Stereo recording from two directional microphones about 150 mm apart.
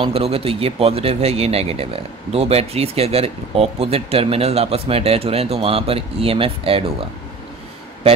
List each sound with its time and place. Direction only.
0.0 s speech: 40° right (ahead or behind)